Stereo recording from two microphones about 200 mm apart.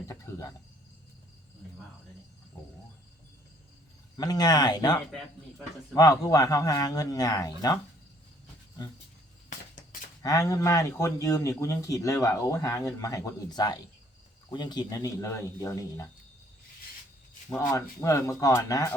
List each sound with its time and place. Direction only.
0.1 s speech: 15° left (ahead or behind)
4.2 s speech: 20° left (ahead or behind)
9.5 s a sound: 40° left (ahead or behind)
10.2 s speech: 15° left (ahead or behind)
18.0 s speech: 15° left (ahead or behind)